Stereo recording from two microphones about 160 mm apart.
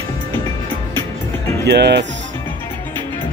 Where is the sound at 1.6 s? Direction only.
90° right.